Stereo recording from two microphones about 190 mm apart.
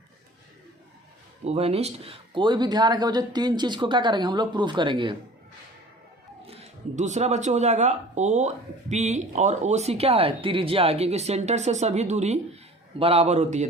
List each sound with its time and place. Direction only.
1.5 s speech: 30° right (ahead or behind)
6.5 s speech: 35° right (ahead or behind)